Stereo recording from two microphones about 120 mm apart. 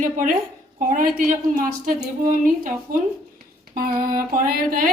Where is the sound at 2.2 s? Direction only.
90° right.